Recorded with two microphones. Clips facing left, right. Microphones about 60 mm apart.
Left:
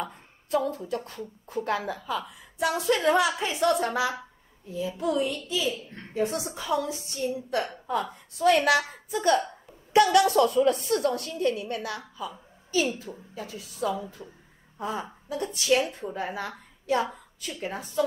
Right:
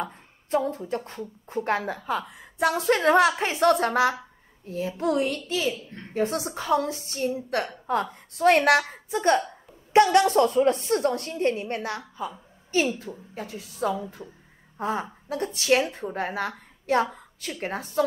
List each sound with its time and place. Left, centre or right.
0.0 s a woman's voice: right
12.2 s a sound: right
13.3 s a woman's voice: right
14.2 s speech: right
14.8 s a woman's voice: right